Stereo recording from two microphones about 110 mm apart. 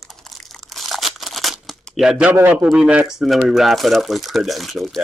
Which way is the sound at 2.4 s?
10° right (ahead or behind).